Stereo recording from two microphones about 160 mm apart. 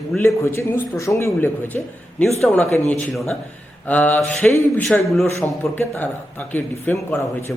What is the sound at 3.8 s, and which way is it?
A man's voice, 10° left (ahead or behind).